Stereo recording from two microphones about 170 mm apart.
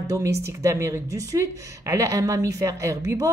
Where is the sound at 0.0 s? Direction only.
20° right (ahead or behind).